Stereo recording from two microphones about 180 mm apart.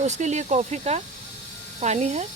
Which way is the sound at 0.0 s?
40° right (ahead or behind).